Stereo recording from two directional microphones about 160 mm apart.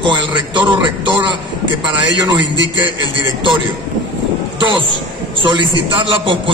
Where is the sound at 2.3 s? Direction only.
30° right (ahead or behind).